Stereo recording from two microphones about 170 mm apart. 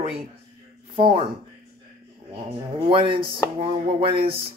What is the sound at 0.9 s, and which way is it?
Speech, 30° right (ahead or behind).